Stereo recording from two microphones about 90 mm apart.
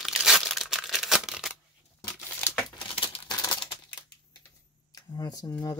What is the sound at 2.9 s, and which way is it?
Crumpling, 80° left.